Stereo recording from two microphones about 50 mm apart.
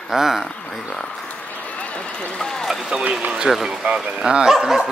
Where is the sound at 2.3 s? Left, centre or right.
Centre.